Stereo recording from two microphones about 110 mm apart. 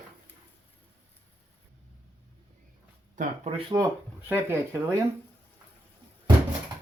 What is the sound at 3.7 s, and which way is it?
Speech, 35° right (ahead or behind).